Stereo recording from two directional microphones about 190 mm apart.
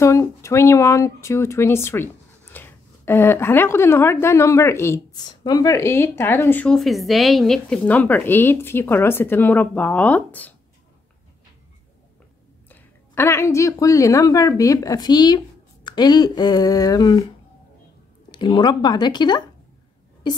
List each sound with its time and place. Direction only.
0.0 s a woman's voice: 15° left (ahead or behind)
12.6 s speech: 10° left (ahead or behind)
18.3 s speech: 25° left (ahead or behind)